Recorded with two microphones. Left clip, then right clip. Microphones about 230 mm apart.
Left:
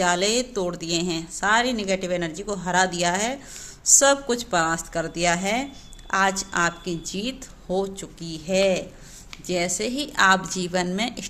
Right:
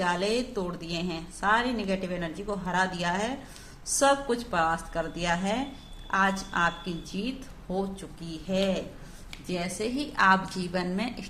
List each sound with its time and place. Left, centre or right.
0.0 s a woman's voice: left